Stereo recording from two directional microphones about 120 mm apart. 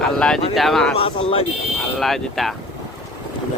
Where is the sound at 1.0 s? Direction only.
50° left (ahead or behind).